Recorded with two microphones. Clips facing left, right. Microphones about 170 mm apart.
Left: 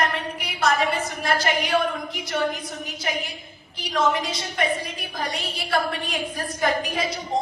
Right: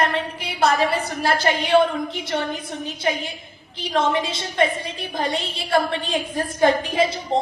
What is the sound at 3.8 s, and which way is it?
A woman's voice, 25° right (ahead or behind).